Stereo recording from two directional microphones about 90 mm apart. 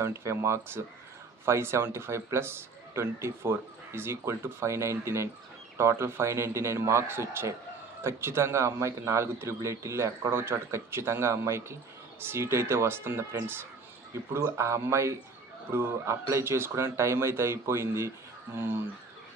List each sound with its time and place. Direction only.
0.0 s a man's voice: 30° right (ahead or behind)